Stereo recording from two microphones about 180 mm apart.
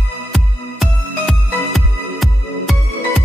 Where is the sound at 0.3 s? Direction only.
Centre (ahead or behind).